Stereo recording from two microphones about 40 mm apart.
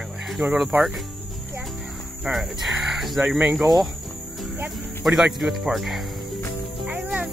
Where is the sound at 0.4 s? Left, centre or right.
Right.